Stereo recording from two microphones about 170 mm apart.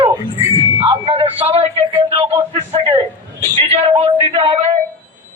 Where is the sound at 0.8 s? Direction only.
30° right (ahead or behind).